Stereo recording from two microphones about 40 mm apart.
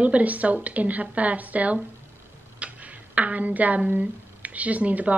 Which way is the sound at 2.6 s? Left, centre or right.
Right.